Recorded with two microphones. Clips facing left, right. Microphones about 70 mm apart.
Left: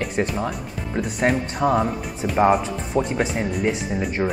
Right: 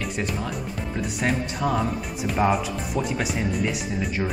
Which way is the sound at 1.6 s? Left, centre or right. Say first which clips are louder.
Left 6 dB; centre.